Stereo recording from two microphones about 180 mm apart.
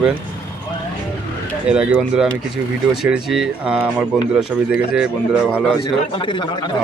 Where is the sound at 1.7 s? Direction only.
5° right (ahead or behind).